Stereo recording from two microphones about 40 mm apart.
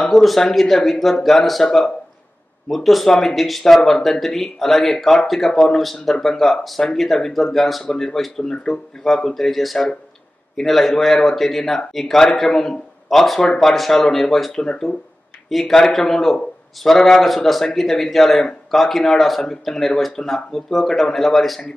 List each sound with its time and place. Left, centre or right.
0.1 s a man's voice: centre